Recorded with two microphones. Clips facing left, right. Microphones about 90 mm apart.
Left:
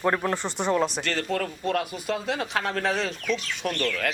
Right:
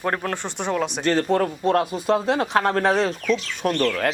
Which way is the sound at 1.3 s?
30° right (ahead or behind).